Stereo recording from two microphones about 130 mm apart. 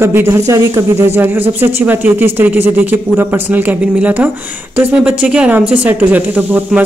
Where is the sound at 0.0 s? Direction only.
20° right (ahead or behind).